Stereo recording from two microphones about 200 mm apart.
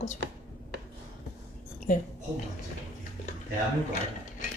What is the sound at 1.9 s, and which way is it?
Speech, 40° left (ahead or behind).